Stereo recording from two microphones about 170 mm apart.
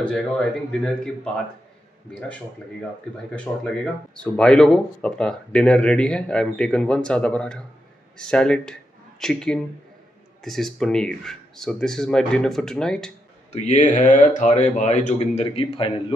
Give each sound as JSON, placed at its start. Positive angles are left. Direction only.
{"t": 0.0, "sound": "speech", "side_deg": 5}
{"t": 13.5, "sound": "speech", "side_deg": 45}